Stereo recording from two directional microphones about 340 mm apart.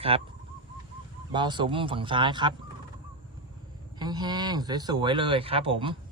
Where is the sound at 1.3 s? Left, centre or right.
Centre.